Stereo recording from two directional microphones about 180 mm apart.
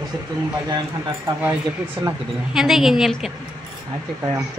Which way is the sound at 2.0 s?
20° right (ahead or behind).